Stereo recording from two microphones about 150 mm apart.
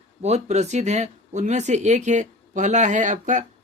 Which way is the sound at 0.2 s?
50° right (ahead or behind).